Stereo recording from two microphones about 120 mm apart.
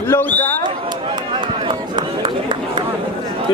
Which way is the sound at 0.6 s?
40° right (ahead or behind).